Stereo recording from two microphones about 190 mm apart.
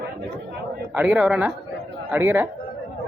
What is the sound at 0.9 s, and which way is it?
Speech, 5° right (ahead or behind).